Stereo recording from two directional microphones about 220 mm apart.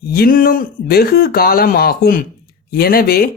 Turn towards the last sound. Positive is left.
turn(degrees=45)  # may be behind; listen again after turning